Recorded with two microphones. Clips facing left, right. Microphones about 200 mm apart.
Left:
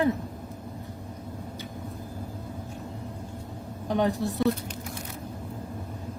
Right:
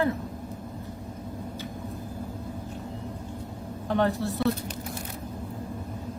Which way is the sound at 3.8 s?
15° left (ahead or behind).